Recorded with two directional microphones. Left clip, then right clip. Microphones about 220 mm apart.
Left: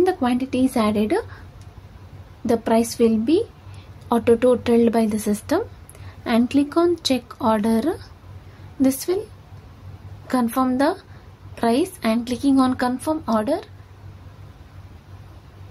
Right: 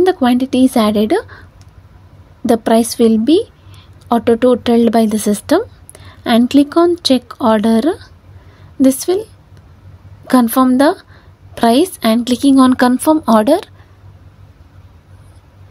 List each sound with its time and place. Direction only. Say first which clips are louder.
0.0 s a woman's voice: right 8 dB; 30° right (ahead or behind)
2.4 s a woman's voice: right 7 dB; 35° right (ahead or behind)
10.2 s a woman's voice: right 9 dB; 35° right (ahead or behind)